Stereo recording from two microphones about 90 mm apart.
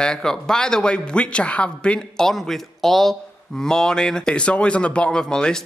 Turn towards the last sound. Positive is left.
turn(degrees=10)  # may be behind; listen again after turning